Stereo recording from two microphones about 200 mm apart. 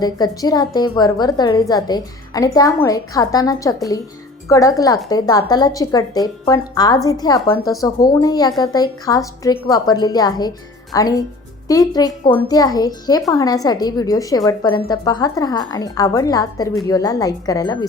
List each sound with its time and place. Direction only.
0.0 s a woman's voice: 20° left (ahead or behind)